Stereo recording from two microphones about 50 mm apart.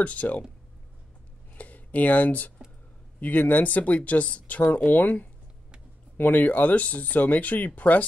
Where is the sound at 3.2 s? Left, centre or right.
Left.